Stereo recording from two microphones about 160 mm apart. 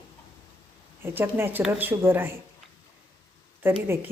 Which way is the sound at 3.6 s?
15° right (ahead or behind).